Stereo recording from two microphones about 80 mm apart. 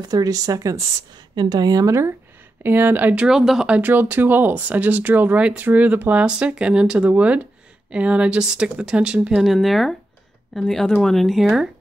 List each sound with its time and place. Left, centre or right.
0.0 s speech: right
1.3 s speech: right
2.6 s speech: right
3.3 s speech: centre
3.7 s speech: right
9.4 s speech: centre